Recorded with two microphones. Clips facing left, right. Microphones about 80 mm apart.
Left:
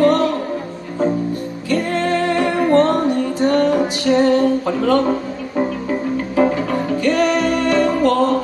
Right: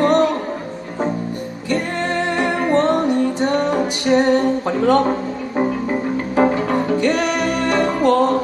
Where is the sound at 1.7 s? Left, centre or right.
Right.